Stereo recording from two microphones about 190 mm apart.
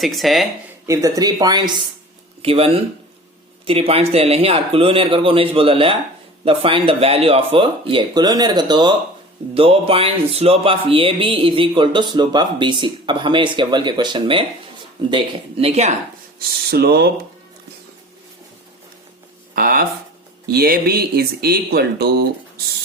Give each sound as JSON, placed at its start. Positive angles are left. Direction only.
{"t": 0.0, "sound": "speech", "side_deg": 0}
{"t": 0.9, "sound": "music", "side_deg": -20}
{"t": 2.4, "sound": "speech", "side_deg": -30}
{"t": 3.7, "sound": "music", "side_deg": -30}
{"t": 15.1, "sound": "speech", "side_deg": -30}
{"t": 16.6, "sound": "speech", "side_deg": -55}
{"t": 19.5, "sound": "speech", "side_deg": -50}